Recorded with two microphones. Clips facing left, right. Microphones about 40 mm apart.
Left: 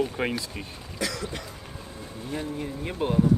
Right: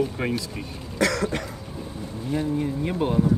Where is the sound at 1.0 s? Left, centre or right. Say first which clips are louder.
Right 8 dB; right.